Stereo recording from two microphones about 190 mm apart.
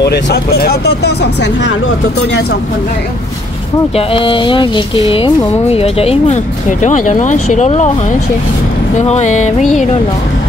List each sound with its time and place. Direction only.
0.0 s speech: 55° left (ahead or behind)
3.9 s speech: 25° left (ahead or behind)
8.9 s speech: 35° left (ahead or behind)